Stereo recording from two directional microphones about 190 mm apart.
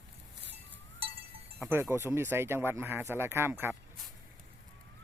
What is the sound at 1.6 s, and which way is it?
Speech, 10° right (ahead or behind).